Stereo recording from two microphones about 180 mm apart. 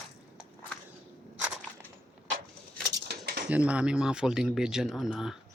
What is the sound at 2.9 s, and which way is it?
Cutlery, 60° right (ahead or behind).